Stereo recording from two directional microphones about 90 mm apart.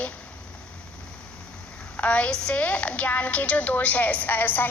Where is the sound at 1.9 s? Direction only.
15° left (ahead or behind).